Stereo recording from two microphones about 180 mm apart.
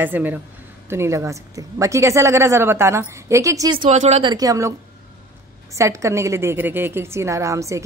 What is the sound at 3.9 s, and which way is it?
A woman's voice, 40° right (ahead or behind).